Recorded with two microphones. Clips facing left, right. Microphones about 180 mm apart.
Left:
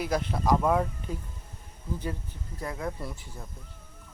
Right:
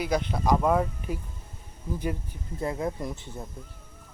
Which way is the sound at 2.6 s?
25° right (ahead or behind).